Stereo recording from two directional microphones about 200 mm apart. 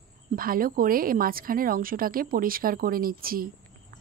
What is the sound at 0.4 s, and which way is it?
Speech, 45° right (ahead or behind).